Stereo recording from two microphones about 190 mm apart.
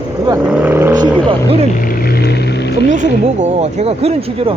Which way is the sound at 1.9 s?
55° left (ahead or behind).